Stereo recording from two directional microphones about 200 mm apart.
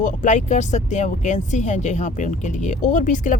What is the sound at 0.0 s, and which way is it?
Speech, 40° left (ahead or behind).